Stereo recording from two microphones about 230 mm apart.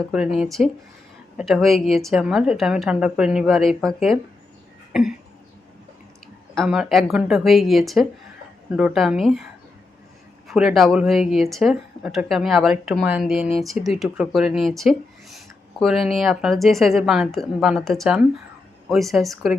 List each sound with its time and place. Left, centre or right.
0.1 s speech: centre
4.9 s a sound: centre
6.5 s speech: centre
10.5 s speech: centre